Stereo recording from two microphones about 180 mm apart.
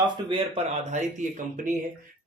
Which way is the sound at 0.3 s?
30° right (ahead or behind).